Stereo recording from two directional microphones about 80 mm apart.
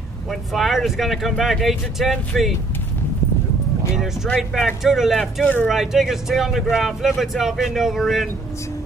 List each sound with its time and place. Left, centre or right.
0.3 s speech: centre
3.9 s speech: centre
5.4 s speech: left
5.7 s speech: centre